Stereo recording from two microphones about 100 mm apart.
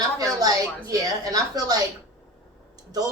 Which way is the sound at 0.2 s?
35° right (ahead or behind).